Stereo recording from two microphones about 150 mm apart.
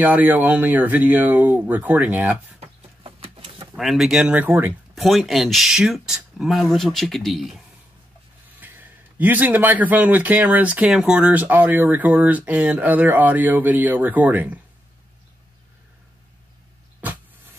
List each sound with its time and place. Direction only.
0.0 s speech: 10° right (ahead or behind)
2.6 s bird: 40° right (ahead or behind)
3.7 s speech: centre (ahead or behind)
4.9 s speech: centre (ahead or behind)
8.5 s speech: 10° right (ahead or behind)
17.0 s vehicle: 10° right (ahead or behind)